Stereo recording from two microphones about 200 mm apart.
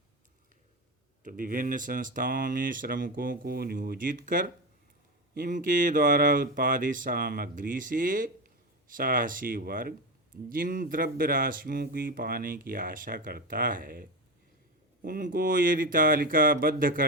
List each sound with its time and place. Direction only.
1.2 s speech: 40° right (ahead or behind)